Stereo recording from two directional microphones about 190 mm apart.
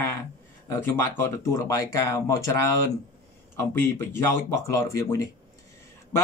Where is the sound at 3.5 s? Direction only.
10° left (ahead or behind).